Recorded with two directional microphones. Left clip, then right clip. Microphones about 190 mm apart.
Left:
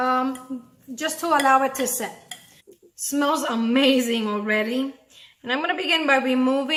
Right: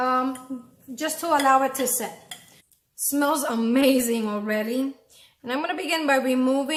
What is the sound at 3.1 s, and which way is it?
A woman's voice, 5° right (ahead or behind).